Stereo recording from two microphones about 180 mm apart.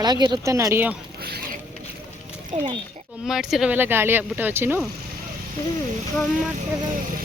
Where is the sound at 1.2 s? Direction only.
60° right (ahead or behind).